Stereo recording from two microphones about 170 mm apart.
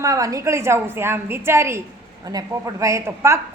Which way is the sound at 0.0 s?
20° right (ahead or behind).